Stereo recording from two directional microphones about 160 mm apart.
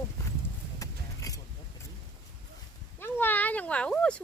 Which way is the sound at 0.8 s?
20° left (ahead or behind).